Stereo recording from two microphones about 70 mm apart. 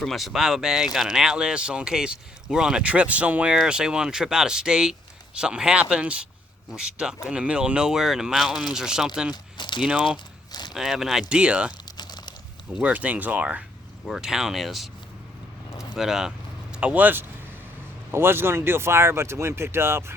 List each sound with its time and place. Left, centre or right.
0.0 s speech: centre
10.5 s a sound: left
10.8 s speech: centre
11.3 s speech: centre
11.9 s crumpling: left
12.8 s speech: right
14.1 s speech: centre
16.0 s speech: centre
16.7 s speech: centre; by 20.1 s right